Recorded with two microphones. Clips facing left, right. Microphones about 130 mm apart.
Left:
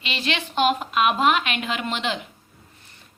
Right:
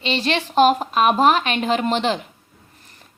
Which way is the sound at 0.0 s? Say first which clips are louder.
Right 6 dB; 35° right (ahead or behind).